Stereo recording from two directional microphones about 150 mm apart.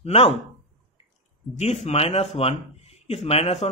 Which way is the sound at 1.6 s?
45° left (ahead or behind).